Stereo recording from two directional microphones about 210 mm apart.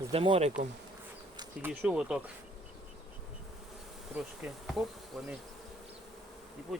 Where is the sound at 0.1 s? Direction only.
25° right (ahead or behind).